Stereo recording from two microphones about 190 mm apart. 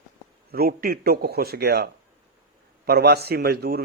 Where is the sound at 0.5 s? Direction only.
50° right (ahead or behind).